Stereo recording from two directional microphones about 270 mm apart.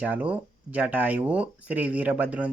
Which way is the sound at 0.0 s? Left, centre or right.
Centre.